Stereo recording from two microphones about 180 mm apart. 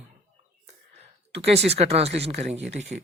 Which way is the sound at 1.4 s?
35° right (ahead or behind).